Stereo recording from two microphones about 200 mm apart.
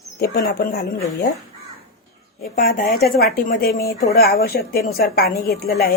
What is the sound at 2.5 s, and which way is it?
A woman's voice, 50° left (ahead or behind).